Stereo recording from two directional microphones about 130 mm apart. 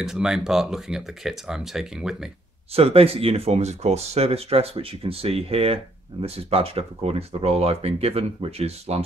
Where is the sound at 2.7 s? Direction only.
50° right (ahead or behind).